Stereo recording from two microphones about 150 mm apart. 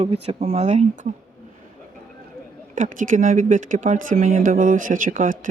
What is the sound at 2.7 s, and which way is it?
Speech, 60° right (ahead or behind).